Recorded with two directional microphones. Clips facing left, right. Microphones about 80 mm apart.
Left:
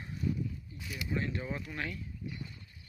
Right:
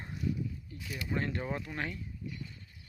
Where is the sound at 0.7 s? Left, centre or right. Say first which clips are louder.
Right 1 dB; right.